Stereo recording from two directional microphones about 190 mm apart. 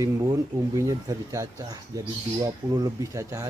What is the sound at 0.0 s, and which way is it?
Speech, 15° right (ahead or behind).